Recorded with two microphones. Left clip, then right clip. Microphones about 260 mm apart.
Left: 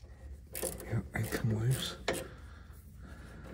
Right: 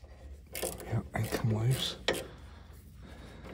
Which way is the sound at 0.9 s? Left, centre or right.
Right.